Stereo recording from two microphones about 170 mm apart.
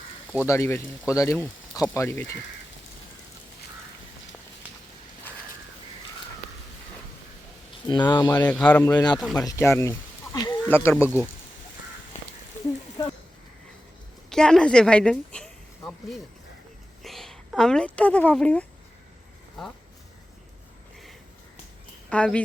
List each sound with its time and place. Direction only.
0.3 s speech: 15° left (ahead or behind)
7.9 s speech: 25° left (ahead or behind)
8.4 s speech: 5° left (ahead or behind)
8.8 s speech: 20° left (ahead or behind)
10.7 s speech: 15° left (ahead or behind)
13.0 s a sound: 20° left (ahead or behind)
14.3 s a woman's voice: 5° left (ahead or behind)
22.1 s speech: 5° left (ahead or behind)